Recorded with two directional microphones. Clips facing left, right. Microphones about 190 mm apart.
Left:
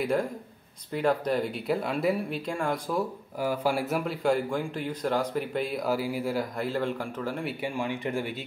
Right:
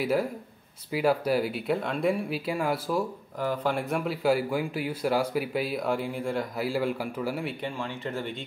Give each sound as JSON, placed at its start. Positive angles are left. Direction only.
{"t": 0.0, "sound": "speech", "side_deg": -5}
{"t": 3.3, "sound": "speech", "side_deg": 10}
{"t": 7.4, "sound": "speech", "side_deg": 10}